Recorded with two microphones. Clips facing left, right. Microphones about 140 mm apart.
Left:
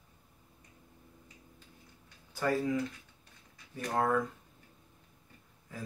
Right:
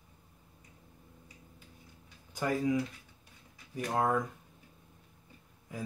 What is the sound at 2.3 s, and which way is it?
Speech, 15° right (ahead or behind).